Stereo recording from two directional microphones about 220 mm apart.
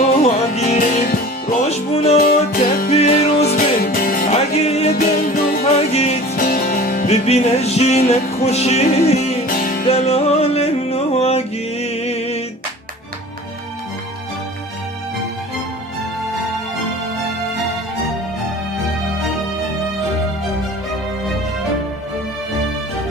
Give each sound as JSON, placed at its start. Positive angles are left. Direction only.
{"t": 0.0, "sound": "music", "side_deg": 30}
{"t": 1.6, "sound": "music", "side_deg": 30}
{"t": 2.1, "sound": "music", "side_deg": 40}
{"t": 2.9, "sound": "music", "side_deg": 30}
{"t": 4.4, "sound": "music", "side_deg": 30}
{"t": 4.9, "sound": "music", "side_deg": 40}
{"t": 5.6, "sound": "music", "side_deg": 30}
{"t": 6.3, "sound": "music", "side_deg": 40}
{"t": 9.9, "sound": "music", "side_deg": 30}